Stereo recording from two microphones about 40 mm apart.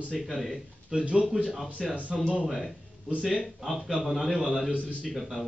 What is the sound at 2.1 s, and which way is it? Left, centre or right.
A man's voice, centre.